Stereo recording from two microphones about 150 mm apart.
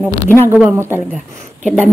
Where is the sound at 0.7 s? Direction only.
15° right (ahead or behind).